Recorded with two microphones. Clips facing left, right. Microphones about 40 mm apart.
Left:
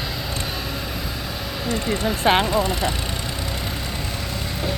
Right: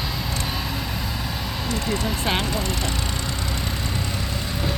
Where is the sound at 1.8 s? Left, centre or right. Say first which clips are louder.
Left 2 dB; centre.